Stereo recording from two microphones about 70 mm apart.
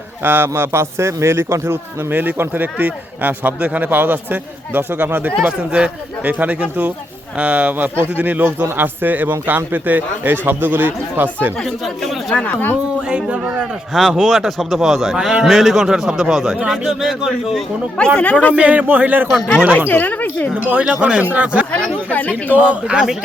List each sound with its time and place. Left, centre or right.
0.2 s a man's voice: right
5.4 s a man's voice: centre
12.3 s speech: centre
13.1 s speech: centre
13.9 s a man's voice: centre
17.9 s speech: centre
18.5 s a man's voice: right
19.9 s speech: left
20.8 s a man's voice: centre
21.7 s speech: centre
22.4 s a man's voice: right